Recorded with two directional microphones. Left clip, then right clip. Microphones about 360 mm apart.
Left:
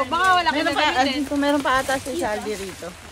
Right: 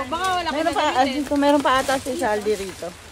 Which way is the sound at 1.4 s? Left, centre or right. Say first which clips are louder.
Right 3 dB; right.